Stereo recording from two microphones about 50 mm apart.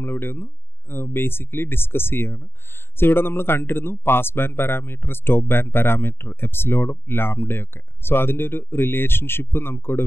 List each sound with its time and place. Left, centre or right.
0.0 s speech: left